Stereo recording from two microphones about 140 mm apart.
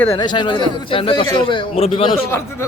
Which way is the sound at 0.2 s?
35° left (ahead or behind).